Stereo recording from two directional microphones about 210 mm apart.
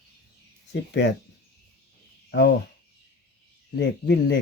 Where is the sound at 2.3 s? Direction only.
50° left (ahead or behind).